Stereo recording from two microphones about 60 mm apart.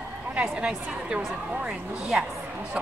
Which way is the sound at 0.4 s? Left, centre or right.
Centre.